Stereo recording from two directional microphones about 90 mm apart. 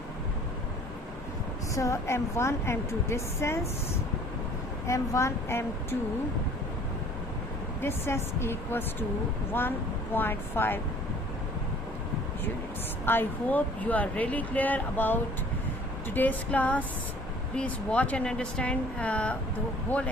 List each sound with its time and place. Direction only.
1.7 s a woman's voice: 35° left (ahead or behind)
4.9 s a woman's voice: 35° left (ahead or behind)
7.8 s speech: 25° left (ahead or behind)
13.1 s speech: 20° left (ahead or behind)